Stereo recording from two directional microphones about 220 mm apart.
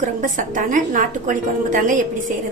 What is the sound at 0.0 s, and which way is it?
A woman's voice, 35° right (ahead or behind).